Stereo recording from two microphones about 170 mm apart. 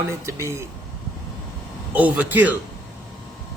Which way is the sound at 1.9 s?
10° right (ahead or behind).